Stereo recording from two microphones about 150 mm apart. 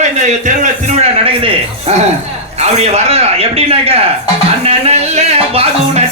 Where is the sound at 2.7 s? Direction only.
45° right (ahead or behind).